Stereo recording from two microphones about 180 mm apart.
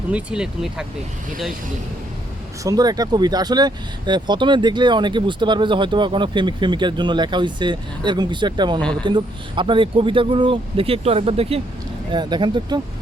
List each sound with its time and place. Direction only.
0.1 s speech: 5° right (ahead or behind)
2.6 s speech: 20° right (ahead or behind)